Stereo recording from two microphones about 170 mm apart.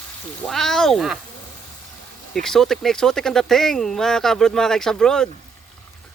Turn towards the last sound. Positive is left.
turn(degrees=5)  # may be behind; listen again after turning